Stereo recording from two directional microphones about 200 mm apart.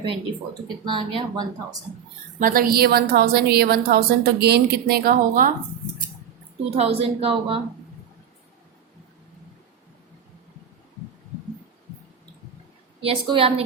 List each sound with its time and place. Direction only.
0.9 s speech: 25° right (ahead or behind)
2.4 s a woman's voice: 45° right (ahead or behind)
6.7 s speech: 30° right (ahead or behind)
13.0 s speech: 30° right (ahead or behind)